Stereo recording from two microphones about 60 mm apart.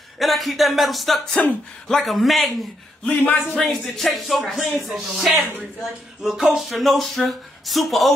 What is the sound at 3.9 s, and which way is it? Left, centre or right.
Speech, centre.